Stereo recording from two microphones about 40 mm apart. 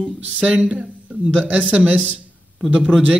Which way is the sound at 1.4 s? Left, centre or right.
Right.